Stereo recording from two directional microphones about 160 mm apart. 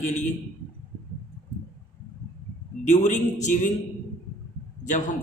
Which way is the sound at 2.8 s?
45° left (ahead or behind).